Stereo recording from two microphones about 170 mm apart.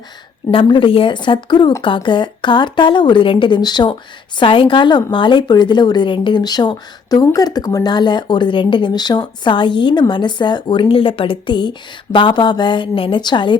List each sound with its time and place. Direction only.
0.5 s a woman's voice: 30° left (ahead or behind)